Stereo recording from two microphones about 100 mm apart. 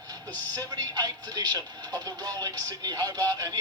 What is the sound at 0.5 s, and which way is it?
A man's voice, 40° right (ahead or behind).